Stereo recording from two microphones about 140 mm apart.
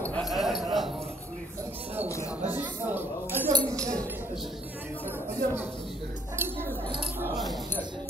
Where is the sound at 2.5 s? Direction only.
15° right (ahead or behind).